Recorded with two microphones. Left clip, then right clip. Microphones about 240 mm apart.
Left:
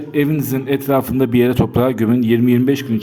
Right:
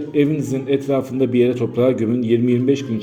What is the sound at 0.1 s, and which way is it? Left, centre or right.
A man's voice, left.